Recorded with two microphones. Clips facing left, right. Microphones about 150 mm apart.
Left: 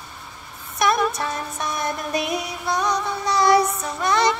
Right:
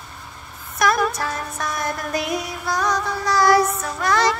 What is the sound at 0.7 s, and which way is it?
Music, 25° left (ahead or behind).